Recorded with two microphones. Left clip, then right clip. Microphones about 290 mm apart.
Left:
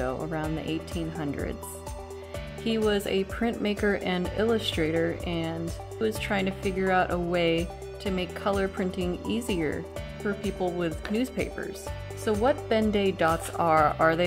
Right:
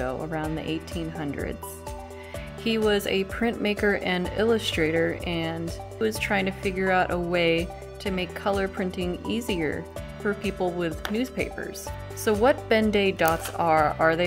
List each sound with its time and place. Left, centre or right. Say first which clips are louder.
0.0 s speech: right 1 dB; centre
2.6 s speech: right 3 dB; centre
12.3 s speech: right 4 dB; centre